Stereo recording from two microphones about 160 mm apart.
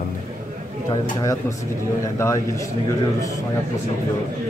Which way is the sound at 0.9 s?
20° left (ahead or behind).